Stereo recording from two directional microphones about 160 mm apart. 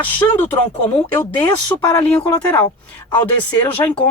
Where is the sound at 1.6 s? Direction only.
25° left (ahead or behind).